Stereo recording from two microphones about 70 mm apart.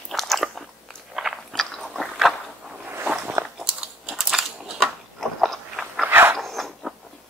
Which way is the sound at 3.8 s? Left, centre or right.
Centre.